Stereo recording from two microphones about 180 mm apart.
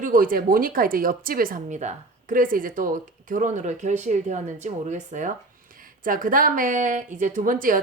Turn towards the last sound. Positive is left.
turn(degrees=-50)  # may be behind; listen again after turning